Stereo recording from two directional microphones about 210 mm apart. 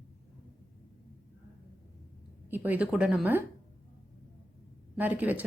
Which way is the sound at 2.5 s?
5° right (ahead or behind).